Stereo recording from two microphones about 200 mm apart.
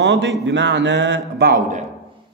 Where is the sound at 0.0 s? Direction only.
60° right (ahead or behind).